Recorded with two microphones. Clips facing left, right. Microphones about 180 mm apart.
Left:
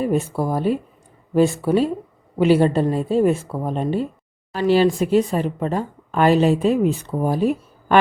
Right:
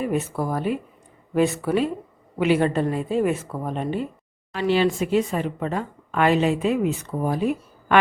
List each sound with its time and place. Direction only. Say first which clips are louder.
0.0 s speech: left 4 dB; 30° left (ahead or behind)